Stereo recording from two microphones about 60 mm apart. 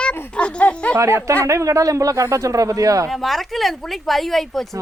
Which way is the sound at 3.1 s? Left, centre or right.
Centre.